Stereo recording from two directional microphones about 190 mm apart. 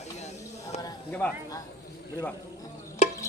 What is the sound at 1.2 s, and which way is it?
Speech, 10° left (ahead or behind).